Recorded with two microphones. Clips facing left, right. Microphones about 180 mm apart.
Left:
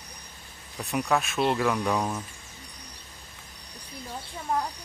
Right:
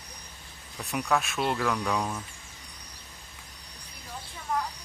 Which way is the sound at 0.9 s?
Centre (ahead or behind).